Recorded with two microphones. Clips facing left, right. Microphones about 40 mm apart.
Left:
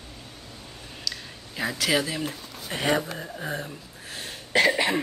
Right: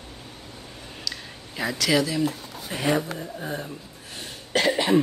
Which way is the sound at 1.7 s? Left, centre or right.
Centre.